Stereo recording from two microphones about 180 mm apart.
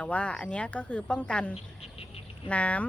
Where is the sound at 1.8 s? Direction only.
35° left (ahead or behind).